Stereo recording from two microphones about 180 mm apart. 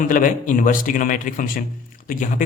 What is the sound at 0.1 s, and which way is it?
A man's voice, 45° left (ahead or behind).